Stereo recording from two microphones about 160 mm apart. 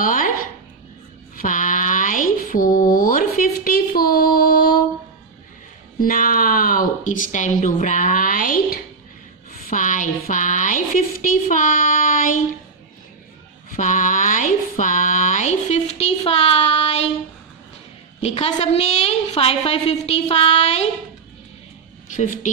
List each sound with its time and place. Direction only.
0.0 s a sound: 55° left (ahead or behind)
1.3 s mantra: 55° left (ahead or behind)
5.9 s a woman's voice: 60° left (ahead or behind)
13.7 s a sound: 55° left (ahead or behind)
18.2 s a woman's voice: 40° left (ahead or behind)
22.1 s speech: 50° left (ahead or behind)